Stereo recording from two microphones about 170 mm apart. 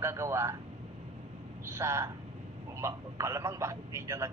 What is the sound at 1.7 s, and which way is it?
A man's voice, 15° right (ahead or behind).